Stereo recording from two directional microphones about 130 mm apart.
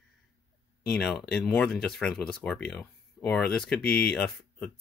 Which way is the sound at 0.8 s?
5° left (ahead or behind).